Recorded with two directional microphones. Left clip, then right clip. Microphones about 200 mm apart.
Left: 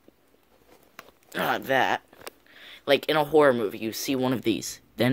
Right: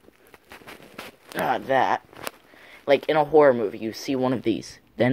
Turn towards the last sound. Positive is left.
turn(degrees=20)  # may be behind; listen again after turning